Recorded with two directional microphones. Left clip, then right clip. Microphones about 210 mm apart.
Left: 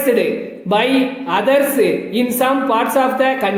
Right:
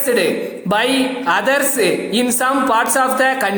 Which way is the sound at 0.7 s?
15° right (ahead or behind).